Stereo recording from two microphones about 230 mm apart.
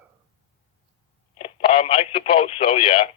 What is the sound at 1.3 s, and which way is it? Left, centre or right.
Radio, left.